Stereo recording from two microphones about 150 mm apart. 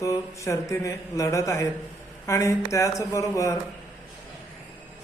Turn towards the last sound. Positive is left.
turn(degrees=20)  # may be behind; listen again after turning